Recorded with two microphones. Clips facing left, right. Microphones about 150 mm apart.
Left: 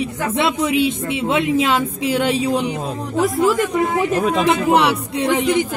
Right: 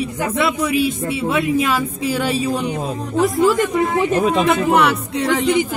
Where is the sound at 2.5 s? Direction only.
20° left (ahead or behind).